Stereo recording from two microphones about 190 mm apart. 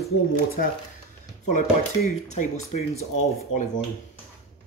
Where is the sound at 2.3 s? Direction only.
35° left (ahead or behind).